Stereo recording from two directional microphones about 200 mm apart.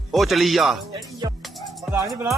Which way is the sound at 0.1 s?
Centre (ahead or behind).